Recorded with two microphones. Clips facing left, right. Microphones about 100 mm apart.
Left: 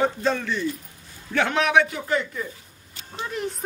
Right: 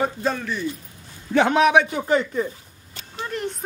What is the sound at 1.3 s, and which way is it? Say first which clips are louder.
A man's voice: right 4 dB; 20° right (ahead or behind).